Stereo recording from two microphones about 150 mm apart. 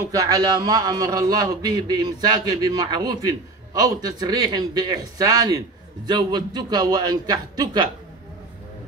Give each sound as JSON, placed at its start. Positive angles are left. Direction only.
{"t": 0.0, "sound": "a man's voice", "side_deg": -25}